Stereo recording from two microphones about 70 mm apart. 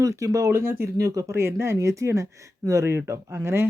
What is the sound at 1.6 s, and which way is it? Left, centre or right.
Speech, right.